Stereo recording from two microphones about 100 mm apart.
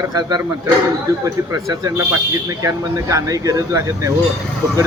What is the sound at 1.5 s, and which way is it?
A man's voice, 40° right (ahead or behind).